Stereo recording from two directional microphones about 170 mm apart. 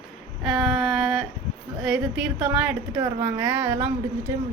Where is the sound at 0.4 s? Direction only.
Centre (ahead or behind).